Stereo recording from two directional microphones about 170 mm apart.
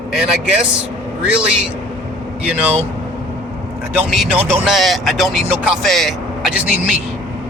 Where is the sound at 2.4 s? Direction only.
10° right (ahead or behind).